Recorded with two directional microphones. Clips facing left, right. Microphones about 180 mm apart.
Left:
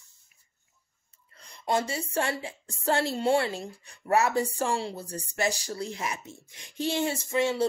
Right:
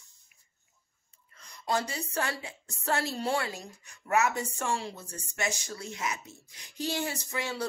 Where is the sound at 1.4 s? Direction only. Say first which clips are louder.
Left 3 dB; 30° left (ahead or behind).